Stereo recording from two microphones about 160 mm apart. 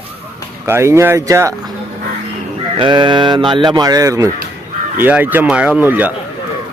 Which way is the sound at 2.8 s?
30° right (ahead or behind).